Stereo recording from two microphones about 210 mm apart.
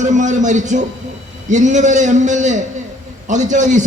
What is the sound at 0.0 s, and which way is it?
A man's voice, 35° right (ahead or behind).